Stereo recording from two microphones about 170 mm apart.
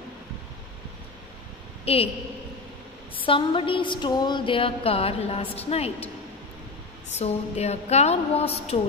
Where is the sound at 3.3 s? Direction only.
30° left (ahead or behind).